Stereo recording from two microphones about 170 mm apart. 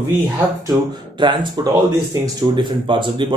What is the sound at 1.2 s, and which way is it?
Speech, 25° right (ahead or behind).